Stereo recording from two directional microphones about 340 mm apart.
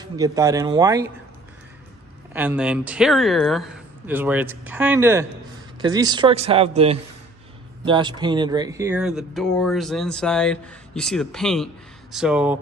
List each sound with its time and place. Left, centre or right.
0.0 s speech: centre
2.3 s speech: centre